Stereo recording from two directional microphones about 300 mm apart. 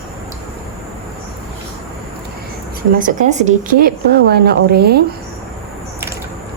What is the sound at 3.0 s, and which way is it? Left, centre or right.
Speech, right.